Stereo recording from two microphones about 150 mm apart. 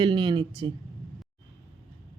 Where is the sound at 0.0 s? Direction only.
30° right (ahead or behind).